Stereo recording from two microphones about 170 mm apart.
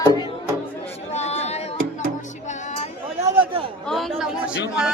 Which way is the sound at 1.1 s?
40° left (ahead or behind).